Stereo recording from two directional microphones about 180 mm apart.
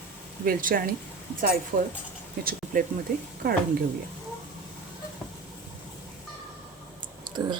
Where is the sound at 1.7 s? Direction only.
40° right (ahead or behind).